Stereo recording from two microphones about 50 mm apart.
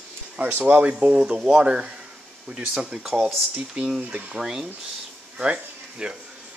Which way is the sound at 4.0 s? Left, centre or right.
Right.